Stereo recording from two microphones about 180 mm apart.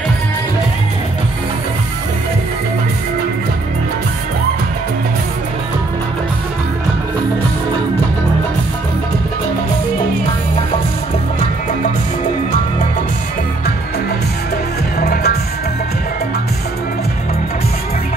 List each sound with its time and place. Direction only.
15.0 s music: 60° left (ahead or behind)